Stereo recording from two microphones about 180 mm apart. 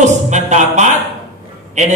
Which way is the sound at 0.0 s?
40° right (ahead or behind).